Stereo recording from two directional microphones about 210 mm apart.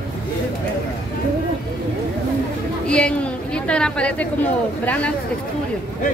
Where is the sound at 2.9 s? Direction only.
5° left (ahead or behind).